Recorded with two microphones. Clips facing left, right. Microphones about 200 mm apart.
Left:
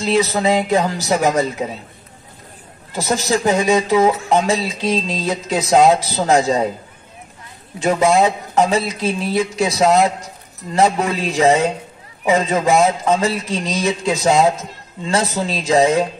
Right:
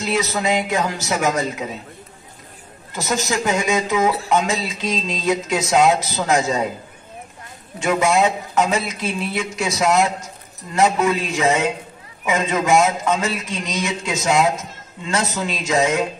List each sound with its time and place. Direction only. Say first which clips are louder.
0.0 s a man's voice: left 5 dB; 30° left (ahead or behind)
2.9 s a man's voice: left 4 dB; 35° left (ahead or behind)
7.8 s a man's voice: left 3 dB; 35° left (ahead or behind)